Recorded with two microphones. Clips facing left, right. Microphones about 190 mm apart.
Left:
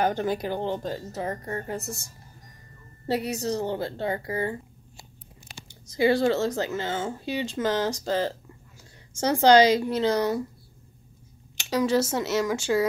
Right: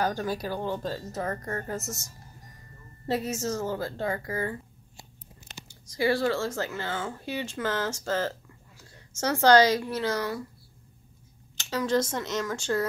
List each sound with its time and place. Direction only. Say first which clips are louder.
0.0 s speech: left 3 dB; 20° left (ahead or behind)
3.3 s speech: left 2 dB; 35° left (ahead or behind)
5.7 s speech: left 4 dB; 20° left (ahead or behind)
11.5 s speech: left 3 dB; 10° left (ahead or behind)